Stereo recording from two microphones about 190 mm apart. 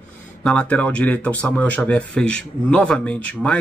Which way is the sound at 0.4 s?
5° left (ahead or behind).